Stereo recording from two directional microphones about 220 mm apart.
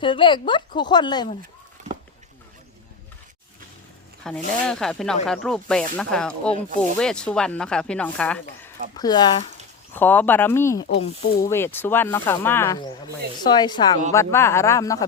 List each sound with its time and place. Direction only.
0.0 s speech: 20° left (ahead or behind)
4.2 s speech: 5° left (ahead or behind)
9.0 s speech: 20° left (ahead or behind)
9.9 s speech: 10° left (ahead or behind)